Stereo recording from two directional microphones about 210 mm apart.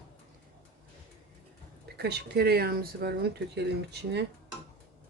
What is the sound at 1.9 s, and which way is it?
Speech, 50° right (ahead or behind).